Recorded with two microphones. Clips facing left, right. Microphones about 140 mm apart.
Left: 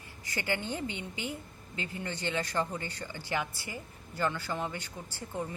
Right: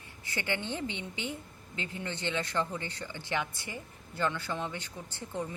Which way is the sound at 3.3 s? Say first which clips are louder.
Even; 5° left (ahead or behind).